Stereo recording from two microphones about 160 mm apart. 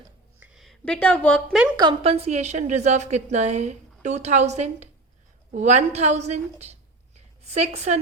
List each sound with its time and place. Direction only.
0.5 s a woman's voice: centre (ahead or behind)
1.7 s a woman's voice: 25° right (ahead or behind); by 7.9 s 45° right (ahead or behind)